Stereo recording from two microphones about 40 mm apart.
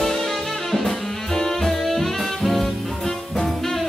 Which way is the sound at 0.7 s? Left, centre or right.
Centre.